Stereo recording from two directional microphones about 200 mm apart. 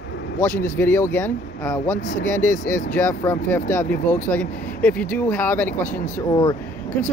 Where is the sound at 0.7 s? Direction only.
10° left (ahead or behind).